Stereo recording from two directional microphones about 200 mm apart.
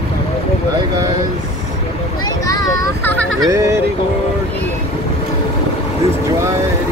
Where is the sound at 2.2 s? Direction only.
20° left (ahead or behind).